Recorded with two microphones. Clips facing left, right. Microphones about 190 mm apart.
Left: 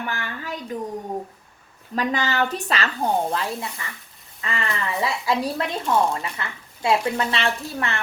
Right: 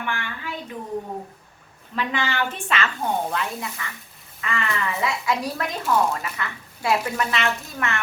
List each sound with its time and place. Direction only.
0.0 s speech: 40° left (ahead or behind)
2.0 s a woman's voice: 40° left (ahead or behind)